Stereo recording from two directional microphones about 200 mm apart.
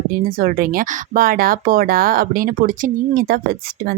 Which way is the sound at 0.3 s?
45° right (ahead or behind).